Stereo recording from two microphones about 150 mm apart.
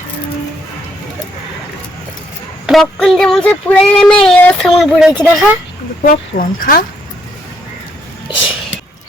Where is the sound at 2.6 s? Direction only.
Centre (ahead or behind).